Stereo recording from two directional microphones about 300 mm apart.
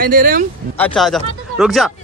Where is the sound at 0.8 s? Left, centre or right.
Centre.